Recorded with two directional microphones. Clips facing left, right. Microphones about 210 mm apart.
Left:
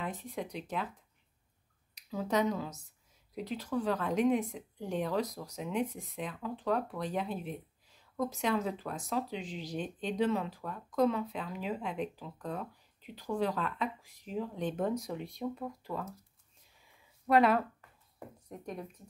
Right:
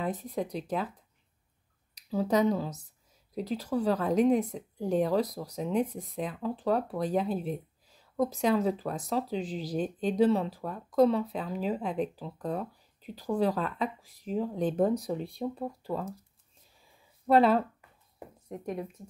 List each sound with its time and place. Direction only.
0.0 s a woman's voice: 40° right (ahead or behind)
2.0 s a woman's voice: 35° right (ahead or behind)
17.3 s speech: 30° right (ahead or behind)
18.7 s speech: 25° right (ahead or behind)